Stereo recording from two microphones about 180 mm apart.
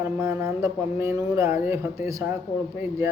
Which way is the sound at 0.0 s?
15° right (ahead or behind).